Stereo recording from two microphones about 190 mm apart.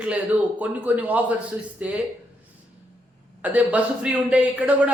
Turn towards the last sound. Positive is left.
turn(degrees=-5)  # may be behind; listen again after turning